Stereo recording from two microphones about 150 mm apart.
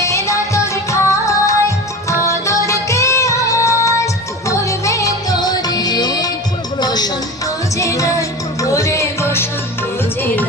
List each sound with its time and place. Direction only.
0.0 s music: 20° left (ahead or behind)